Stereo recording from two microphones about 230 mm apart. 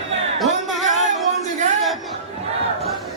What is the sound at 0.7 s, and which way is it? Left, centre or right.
Music, centre.